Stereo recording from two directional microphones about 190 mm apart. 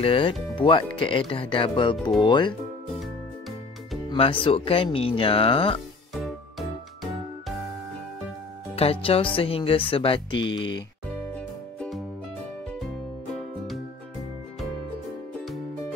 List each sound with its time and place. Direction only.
0.0 s speech: 30° left (ahead or behind)
3.0 s music: centre (ahead or behind)
4.1 s speech: 25° left (ahead or behind)
6.1 s music: centre (ahead or behind)
8.7 s speech: 30° left (ahead or behind)
11.3 s music: 5° left (ahead or behind)